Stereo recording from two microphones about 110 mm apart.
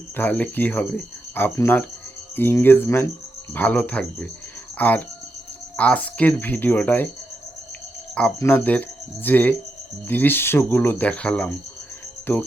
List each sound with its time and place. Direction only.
0.2 s speech: 15° left (ahead or behind)
8.4 s speech: 20° left (ahead or behind)